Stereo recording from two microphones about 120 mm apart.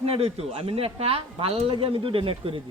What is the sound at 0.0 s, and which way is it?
A woman's voice, 55° right (ahead or behind).